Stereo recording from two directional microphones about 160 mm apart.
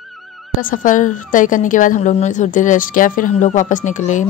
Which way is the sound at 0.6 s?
55° left (ahead or behind).